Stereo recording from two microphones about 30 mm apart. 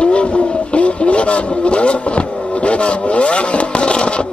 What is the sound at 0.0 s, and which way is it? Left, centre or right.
Vehicle, left.